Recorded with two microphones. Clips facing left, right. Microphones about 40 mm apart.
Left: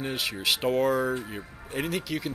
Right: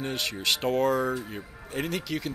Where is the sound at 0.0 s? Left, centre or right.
Centre.